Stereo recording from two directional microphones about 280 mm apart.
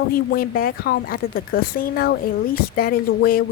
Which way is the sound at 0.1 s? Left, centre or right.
Left.